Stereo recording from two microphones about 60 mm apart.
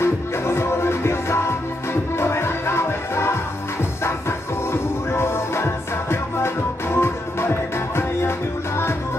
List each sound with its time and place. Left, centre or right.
0.0 s music: left
5.1 s music: left